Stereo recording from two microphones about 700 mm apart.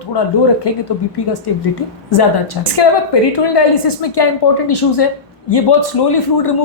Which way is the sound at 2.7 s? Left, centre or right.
Left.